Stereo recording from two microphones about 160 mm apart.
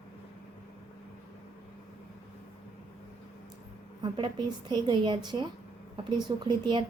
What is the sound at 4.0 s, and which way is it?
Speech, 30° right (ahead or behind).